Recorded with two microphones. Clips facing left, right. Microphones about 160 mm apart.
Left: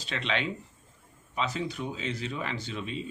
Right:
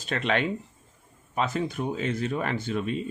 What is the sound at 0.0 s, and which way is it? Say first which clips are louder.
Speech: right 5 dB; 50° right (ahead or behind).